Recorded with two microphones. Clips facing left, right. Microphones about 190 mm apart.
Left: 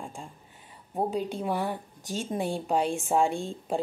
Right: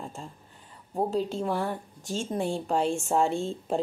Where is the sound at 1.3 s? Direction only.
15° left (ahead or behind).